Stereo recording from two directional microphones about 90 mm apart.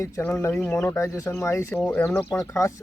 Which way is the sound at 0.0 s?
25° left (ahead or behind).